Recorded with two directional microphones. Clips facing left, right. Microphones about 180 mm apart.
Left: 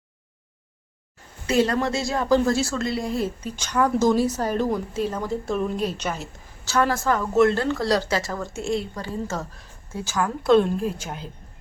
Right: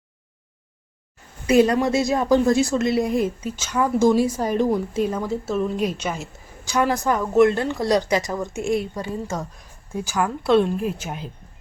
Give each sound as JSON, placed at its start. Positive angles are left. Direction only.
{"t": 1.5, "sound": "a woman's voice", "side_deg": -20}
{"t": 9.9, "sound": "a woman's voice", "side_deg": -15}
{"t": 10.8, "sound": "a woman's voice", "side_deg": -10}